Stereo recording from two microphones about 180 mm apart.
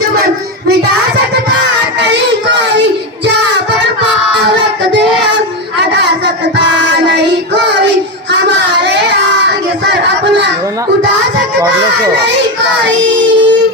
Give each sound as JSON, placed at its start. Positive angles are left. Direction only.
{"t": 2.0, "sound": "child singing", "side_deg": -75}
{"t": 4.4, "sound": "child singing", "side_deg": -75}
{"t": 5.9, "sound": "a sound", "side_deg": -70}
{"t": 6.8, "sound": "child singing", "side_deg": -70}
{"t": 12.8, "sound": "child singing", "side_deg": -80}